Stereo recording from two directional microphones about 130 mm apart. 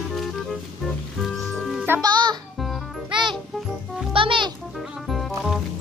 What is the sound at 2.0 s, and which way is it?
Music, 30° right (ahead or behind).